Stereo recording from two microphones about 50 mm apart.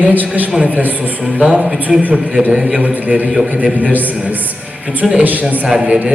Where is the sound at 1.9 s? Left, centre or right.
Centre.